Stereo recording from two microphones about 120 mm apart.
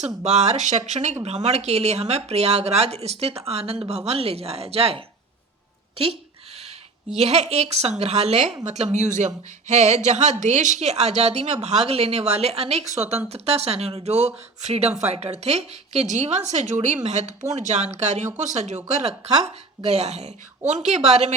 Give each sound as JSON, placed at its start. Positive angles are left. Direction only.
{"t": 0.0, "sound": "speech", "side_deg": -70}
{"t": 7.1, "sound": "speech", "side_deg": -65}
{"t": 10.4, "sound": "speech", "side_deg": -90}
{"t": 16.0, "sound": "speech", "side_deg": -75}
{"t": 18.9, "sound": "speech", "side_deg": -60}